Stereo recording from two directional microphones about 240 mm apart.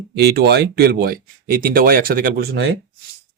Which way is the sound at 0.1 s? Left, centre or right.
Right.